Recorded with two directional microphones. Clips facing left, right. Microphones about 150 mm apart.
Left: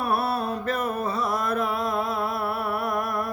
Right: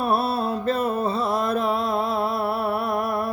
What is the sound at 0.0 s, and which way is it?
Music, 25° right (ahead or behind).